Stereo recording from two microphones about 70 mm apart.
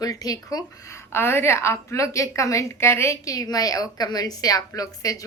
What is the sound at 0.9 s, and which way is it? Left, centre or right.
A woman's voice, left.